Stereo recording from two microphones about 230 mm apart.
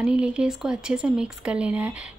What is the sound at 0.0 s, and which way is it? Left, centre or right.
Speech, centre.